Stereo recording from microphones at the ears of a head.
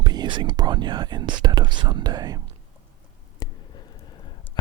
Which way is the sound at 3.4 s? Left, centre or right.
Left.